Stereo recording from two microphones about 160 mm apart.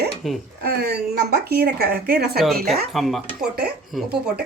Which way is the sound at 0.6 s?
75° right (ahead or behind).